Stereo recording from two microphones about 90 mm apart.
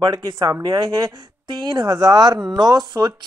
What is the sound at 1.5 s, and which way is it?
Speech, 60° right (ahead or behind).